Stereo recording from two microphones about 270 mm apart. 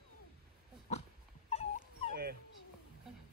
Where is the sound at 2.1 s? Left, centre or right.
Right.